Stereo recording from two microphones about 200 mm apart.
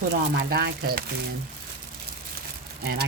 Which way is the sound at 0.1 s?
50° right (ahead or behind).